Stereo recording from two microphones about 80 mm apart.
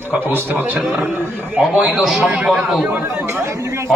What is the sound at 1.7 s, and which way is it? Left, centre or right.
A man's voice, centre.